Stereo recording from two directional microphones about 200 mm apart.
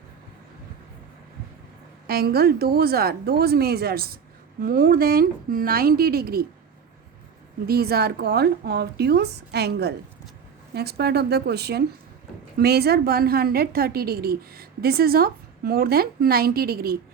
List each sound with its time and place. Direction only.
2.0 s a woman's voice: 50° right (ahead or behind)
7.7 s a woman's voice: 50° right (ahead or behind)